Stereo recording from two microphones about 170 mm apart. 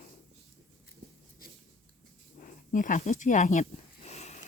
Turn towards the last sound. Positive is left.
turn(degrees=40)  # may be behind; listen again after turning